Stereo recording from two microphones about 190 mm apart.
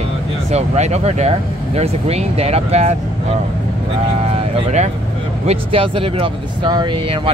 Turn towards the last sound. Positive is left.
turn(degrees=-30)  # may be behind; listen again after turning